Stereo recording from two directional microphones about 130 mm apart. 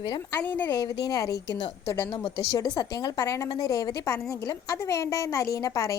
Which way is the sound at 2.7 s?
30° left (ahead or behind).